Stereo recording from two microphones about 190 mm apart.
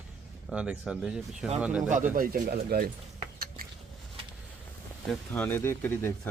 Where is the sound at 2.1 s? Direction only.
50° right (ahead or behind).